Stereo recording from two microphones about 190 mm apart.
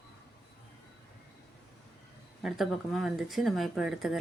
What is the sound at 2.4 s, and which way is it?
Speech, centre (ahead or behind).